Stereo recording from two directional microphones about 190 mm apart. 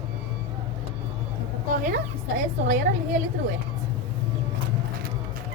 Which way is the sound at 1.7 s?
45° right (ahead or behind).